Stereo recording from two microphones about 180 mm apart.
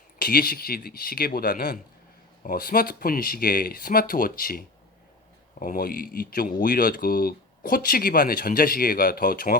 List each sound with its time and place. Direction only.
0.2 s speech: 55° left (ahead or behind)